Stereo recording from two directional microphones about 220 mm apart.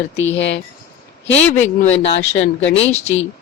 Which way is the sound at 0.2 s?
55° left (ahead or behind).